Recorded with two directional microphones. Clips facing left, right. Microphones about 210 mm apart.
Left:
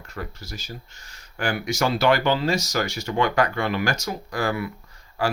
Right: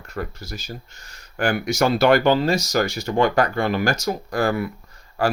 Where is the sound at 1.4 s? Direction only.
50° right (ahead or behind); by 4.1 s 35° right (ahead or behind).